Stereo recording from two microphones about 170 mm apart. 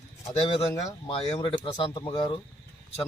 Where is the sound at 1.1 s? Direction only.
30° left (ahead or behind).